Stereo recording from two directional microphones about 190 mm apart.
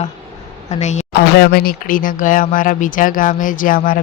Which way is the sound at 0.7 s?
40° left (ahead or behind).